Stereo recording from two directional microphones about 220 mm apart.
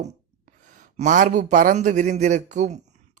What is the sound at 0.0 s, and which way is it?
A man's voice, 35° right (ahead or behind).